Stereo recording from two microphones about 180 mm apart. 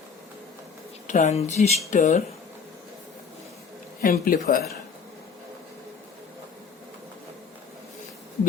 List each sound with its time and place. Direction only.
1.0 s speech: 40° left (ahead or behind)
4.0 s speech: 50° left (ahead or behind)